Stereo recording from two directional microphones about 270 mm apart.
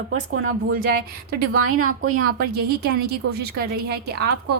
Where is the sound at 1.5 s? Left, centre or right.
Right.